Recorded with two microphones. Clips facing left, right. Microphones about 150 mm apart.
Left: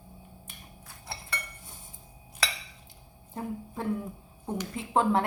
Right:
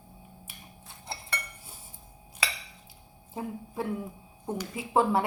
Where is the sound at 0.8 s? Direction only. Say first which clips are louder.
Right 2 dB; 25° right (ahead or behind).